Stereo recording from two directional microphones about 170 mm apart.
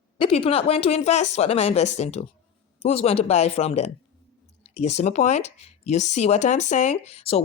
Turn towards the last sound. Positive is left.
turn(degrees=35)  # may be behind; listen again after turning